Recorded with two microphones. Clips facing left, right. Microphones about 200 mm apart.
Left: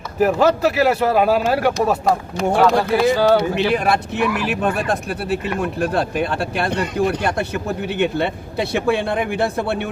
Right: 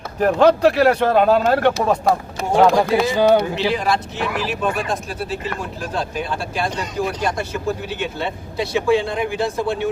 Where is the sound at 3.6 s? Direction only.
60° left (ahead or behind).